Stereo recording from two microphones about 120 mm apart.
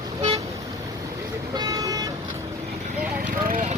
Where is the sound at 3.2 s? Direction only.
70° right (ahead or behind).